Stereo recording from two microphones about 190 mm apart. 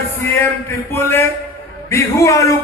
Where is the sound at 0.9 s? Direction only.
10° left (ahead or behind).